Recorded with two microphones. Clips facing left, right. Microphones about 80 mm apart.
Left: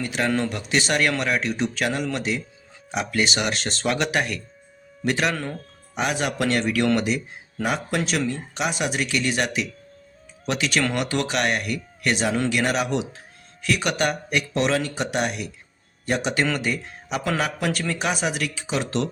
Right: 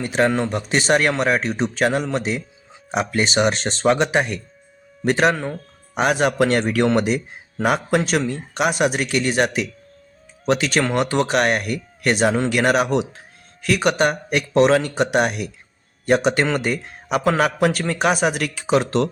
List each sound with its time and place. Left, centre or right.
0.0 s speech: right
0.3 s speech: right
0.7 s speech: right
5.0 s speech: right
5.3 s speech: centre
5.9 s a man's voice: right